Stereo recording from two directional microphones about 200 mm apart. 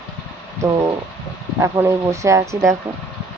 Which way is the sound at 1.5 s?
15° right (ahead or behind).